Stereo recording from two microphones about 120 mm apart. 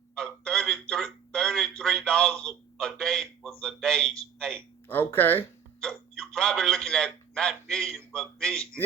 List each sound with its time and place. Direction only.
0.1 s speech: 5° left (ahead or behind)
4.9 s speech: 15° left (ahead or behind)
5.8 s a man's voice: 5° left (ahead or behind)